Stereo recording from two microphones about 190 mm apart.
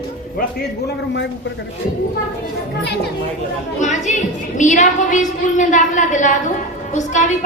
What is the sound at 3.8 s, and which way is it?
A woman's voice, 40° left (ahead or behind).